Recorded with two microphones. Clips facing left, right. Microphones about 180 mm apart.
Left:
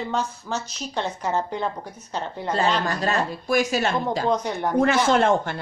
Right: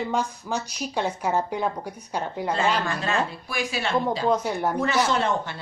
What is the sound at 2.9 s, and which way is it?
Speech, 40° left (ahead or behind).